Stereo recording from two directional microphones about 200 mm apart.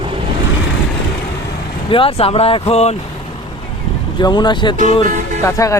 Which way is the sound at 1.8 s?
25° left (ahead or behind).